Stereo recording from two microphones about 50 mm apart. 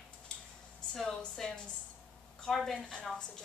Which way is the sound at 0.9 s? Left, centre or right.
Centre.